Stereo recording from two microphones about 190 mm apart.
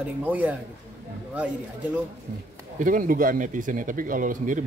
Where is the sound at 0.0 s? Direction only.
10° right (ahead or behind).